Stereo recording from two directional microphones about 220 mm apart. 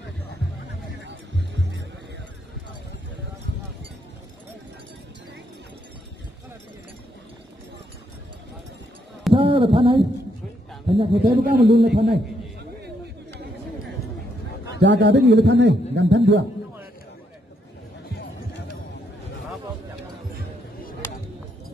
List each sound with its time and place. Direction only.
9.3 s a sound: 25° right (ahead or behind)
10.9 s a man's voice: 25° right (ahead or behind)
11.4 s a man's voice: 45° right (ahead or behind)
14.8 s a man's voice: 50° right (ahead or behind)